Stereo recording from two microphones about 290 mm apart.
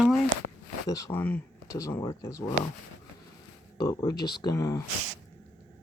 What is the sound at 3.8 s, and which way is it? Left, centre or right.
Speech, centre.